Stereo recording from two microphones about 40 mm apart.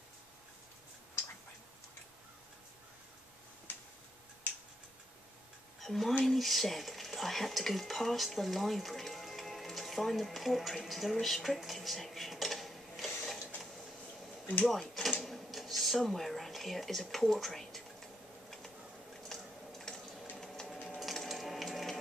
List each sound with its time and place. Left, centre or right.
5.8 s speech: centre
6.2 s dishes: centre
14.7 s speech: centre
15.2 s whispering: centre
19.2 s a sound: centre